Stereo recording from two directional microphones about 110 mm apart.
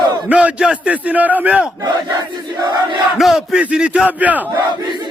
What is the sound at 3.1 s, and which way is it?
A man's voice, 5° right (ahead or behind).